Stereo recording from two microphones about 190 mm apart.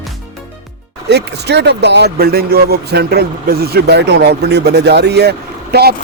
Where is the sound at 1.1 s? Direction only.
60° right (ahead or behind).